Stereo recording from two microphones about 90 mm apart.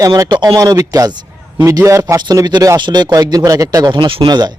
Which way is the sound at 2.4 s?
55° right (ahead or behind).